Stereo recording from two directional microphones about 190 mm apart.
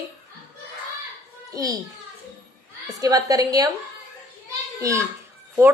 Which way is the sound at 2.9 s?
20° right (ahead or behind).